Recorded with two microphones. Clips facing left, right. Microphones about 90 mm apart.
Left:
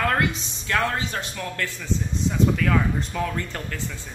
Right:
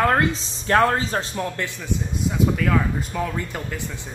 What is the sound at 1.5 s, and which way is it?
Speech, 20° right (ahead or behind).